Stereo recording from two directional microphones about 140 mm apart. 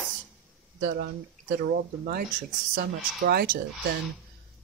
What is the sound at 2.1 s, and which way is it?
Speech, 90° right.